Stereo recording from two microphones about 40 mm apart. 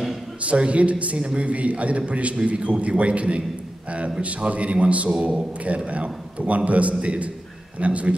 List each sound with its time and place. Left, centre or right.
0.4 s a man's voice: right